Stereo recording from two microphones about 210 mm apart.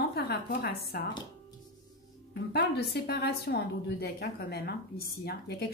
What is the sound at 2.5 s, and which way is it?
A woman's voice, 50° left (ahead or behind).